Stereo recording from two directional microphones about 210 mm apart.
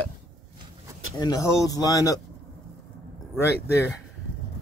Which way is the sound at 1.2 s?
15° left (ahead or behind).